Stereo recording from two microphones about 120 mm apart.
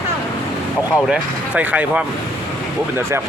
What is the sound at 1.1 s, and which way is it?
Speech, 10° right (ahead or behind).